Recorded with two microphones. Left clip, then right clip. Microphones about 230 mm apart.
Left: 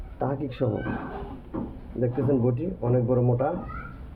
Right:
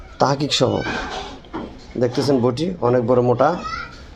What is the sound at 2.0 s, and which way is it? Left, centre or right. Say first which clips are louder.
Speech: right 7 dB; right.